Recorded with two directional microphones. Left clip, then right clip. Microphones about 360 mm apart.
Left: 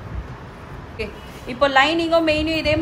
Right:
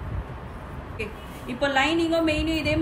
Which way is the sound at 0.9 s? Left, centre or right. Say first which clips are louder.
Left 4 dB; centre.